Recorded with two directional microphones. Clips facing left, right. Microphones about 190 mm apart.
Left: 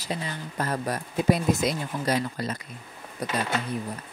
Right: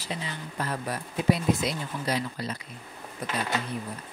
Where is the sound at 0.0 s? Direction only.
45° left (ahead or behind).